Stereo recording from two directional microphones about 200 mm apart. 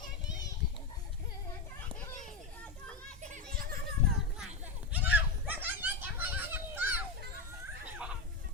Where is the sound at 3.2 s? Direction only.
40° right (ahead or behind).